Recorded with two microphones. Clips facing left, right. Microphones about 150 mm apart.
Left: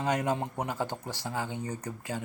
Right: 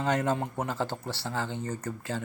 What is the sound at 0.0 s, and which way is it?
Speech, 15° left (ahead or behind).